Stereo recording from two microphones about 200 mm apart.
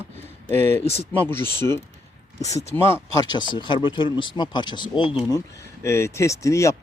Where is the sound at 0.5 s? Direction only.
10° left (ahead or behind).